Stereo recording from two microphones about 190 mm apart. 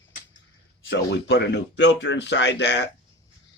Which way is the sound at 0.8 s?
70° left (ahead or behind).